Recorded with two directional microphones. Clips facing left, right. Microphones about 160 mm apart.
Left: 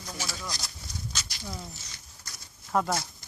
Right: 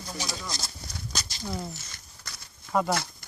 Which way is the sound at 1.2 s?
40° right (ahead or behind).